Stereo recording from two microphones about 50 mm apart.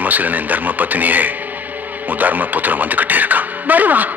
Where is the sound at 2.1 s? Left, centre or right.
Right.